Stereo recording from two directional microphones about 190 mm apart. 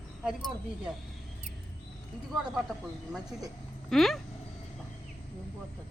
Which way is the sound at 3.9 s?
Centre (ahead or behind).